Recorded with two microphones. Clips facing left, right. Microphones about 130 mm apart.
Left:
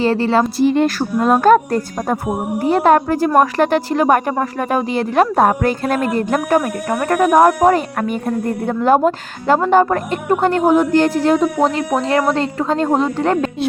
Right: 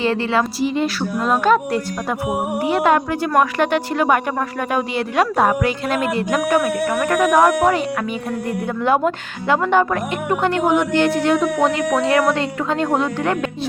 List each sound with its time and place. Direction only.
0.0 s a woman's voice: 40° left (ahead or behind)
0.6 s a woman's voice: 55° left (ahead or behind); by 13.5 s 35° left (ahead or behind)